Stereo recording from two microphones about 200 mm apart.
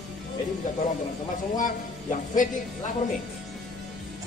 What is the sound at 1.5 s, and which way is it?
Speech, 40° left (ahead or behind).